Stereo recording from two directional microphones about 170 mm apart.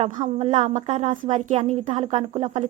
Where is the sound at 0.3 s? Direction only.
40° right (ahead or behind).